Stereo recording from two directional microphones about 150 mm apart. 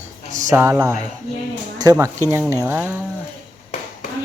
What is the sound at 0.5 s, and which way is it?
Speech, 20° right (ahead or behind).